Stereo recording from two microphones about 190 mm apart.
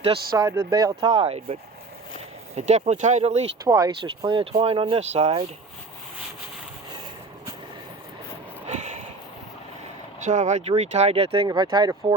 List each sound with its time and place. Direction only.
0.3 s speech: 15° right (ahead or behind); by 1.5 s 30° right (ahead or behind)
2.6 s speech: 35° right (ahead or behind)
3.6 s speech: 20° right (ahead or behind)
8.6 s a sound: 35° right (ahead or behind)
10.2 s speech: 40° right (ahead or behind); by 12.1 s 20° right (ahead or behind)